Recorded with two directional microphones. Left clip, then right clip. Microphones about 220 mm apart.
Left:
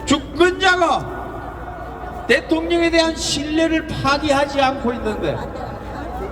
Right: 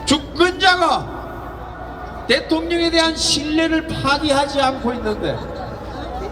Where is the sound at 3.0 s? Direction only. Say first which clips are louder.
Right 3 dB; 25° left (ahead or behind).